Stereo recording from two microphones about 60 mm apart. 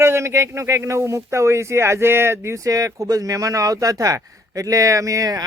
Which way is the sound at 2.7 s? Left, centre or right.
Right.